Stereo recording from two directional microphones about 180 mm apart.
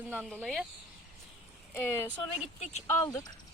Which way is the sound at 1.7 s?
15° left (ahead or behind).